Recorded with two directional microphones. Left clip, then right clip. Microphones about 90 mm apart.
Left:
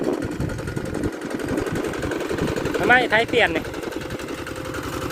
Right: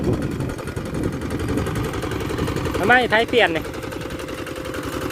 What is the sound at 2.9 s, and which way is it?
Speech, 40° right (ahead or behind).